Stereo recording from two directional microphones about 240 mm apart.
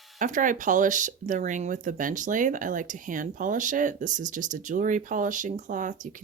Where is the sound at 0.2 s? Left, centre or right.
Right.